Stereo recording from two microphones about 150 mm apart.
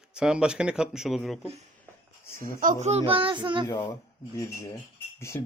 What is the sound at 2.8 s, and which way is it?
Speech, 40° right (ahead or behind).